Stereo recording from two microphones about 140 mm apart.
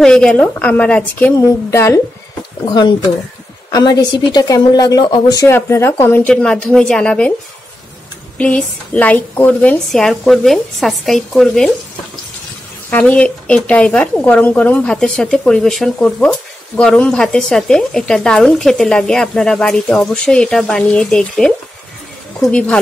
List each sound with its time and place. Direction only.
0.0 s a woman's voice: 5° left (ahead or behind)
1.7 s speech: 20° left (ahead or behind)
2.6 s a woman's voice: 30° left (ahead or behind); by 7.3 s 10° left (ahead or behind)
8.4 s speech: 10° left (ahead or behind)
12.9 s a woman's voice: 10° left (ahead or behind)